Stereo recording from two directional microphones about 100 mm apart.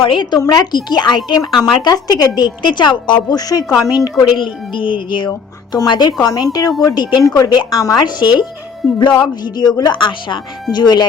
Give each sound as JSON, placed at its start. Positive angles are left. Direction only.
{"t": 0.0, "sound": "speech", "side_deg": 55}
{"t": 0.3, "sound": "speech", "side_deg": 40}
{"t": 1.5, "sound": "speech", "side_deg": 0}
{"t": 1.8, "sound": "speech", "side_deg": 45}
{"t": 4.7, "sound": "speech", "side_deg": 55}
{"t": 7.3, "sound": "speech", "side_deg": 35}
{"t": 8.0, "sound": "speech", "side_deg": 50}